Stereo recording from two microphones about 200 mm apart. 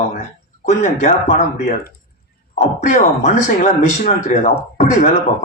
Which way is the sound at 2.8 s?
35° left (ahead or behind).